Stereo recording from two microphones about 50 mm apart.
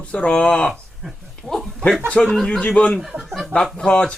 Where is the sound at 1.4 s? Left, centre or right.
Centre.